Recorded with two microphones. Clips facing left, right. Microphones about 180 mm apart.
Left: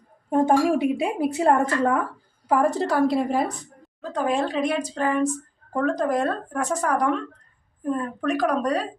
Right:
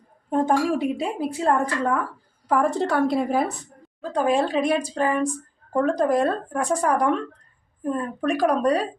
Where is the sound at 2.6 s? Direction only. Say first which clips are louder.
Left 1 dB; centre (ahead or behind).